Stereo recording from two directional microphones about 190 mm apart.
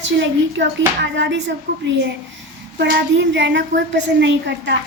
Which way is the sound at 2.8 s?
65° right (ahead or behind).